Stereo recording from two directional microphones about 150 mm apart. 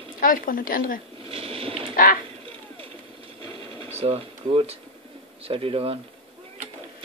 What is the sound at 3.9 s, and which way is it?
Speech, 40° right (ahead or behind).